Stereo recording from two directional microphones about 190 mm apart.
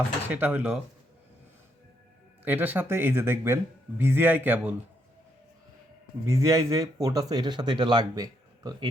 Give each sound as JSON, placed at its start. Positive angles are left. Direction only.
{"t": 0.3, "sound": "speech", "side_deg": -10}
{"t": 2.4, "sound": "speech", "side_deg": -10}
{"t": 6.2, "sound": "speech", "side_deg": -15}